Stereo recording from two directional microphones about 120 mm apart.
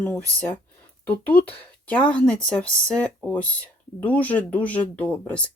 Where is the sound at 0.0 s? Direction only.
15° left (ahead or behind).